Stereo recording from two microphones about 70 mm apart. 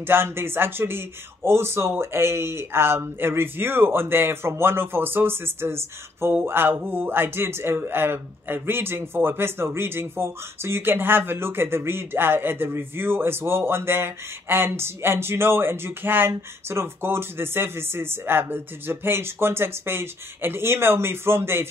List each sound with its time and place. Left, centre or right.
0.0 s a man's voice: right